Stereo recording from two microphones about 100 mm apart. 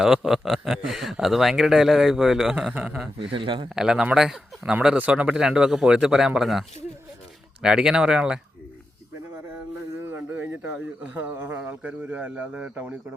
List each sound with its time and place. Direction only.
0.0 s speech: 5° right (ahead or behind)
3.2 s a man's voice: 60° right (ahead or behind)
3.8 s speech: 5° right (ahead or behind)
10.1 s a sound: 20° right (ahead or behind)
11.2 s speech: 20° right (ahead or behind)